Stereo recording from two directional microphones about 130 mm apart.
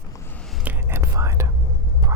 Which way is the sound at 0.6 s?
15° right (ahead or behind).